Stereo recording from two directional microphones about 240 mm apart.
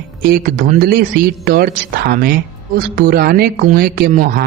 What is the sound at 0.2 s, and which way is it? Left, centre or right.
Speech, right.